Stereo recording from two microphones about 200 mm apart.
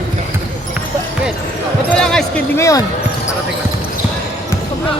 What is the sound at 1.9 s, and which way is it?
Basketball bounce, 5° left (ahead or behind).